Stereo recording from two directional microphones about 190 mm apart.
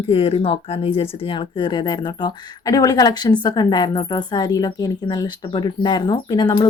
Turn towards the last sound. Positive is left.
turn(degrees=20)  # may be behind; listen again after turning